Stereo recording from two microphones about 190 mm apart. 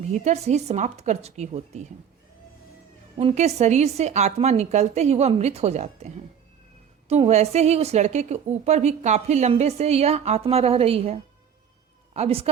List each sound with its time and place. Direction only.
0.0 s a woman's voice: 35° right (ahead or behind)
3.2 s a woman's voice: 35° right (ahead or behind)